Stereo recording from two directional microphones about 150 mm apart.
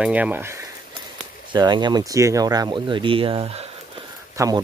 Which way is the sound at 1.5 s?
30° right (ahead or behind).